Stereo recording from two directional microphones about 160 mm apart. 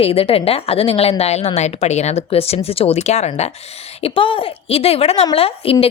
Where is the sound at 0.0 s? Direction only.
35° left (ahead or behind).